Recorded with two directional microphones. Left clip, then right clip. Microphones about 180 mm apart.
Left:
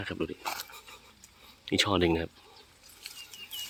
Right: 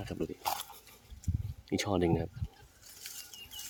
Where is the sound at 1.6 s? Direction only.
5° right (ahead or behind).